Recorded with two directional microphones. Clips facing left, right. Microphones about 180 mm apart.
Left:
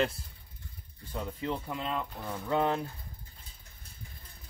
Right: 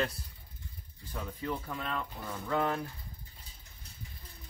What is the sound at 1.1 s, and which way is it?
Speech, 25° left (ahead or behind).